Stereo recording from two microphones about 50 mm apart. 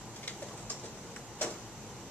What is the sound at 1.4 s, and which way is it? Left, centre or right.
Tick-tock, left.